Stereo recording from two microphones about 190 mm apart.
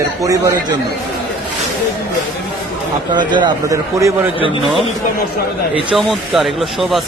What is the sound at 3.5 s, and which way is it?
Speech, 15° right (ahead or behind).